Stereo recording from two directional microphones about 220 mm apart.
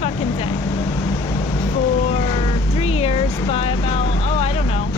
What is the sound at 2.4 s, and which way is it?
Vehicle, 25° left (ahead or behind).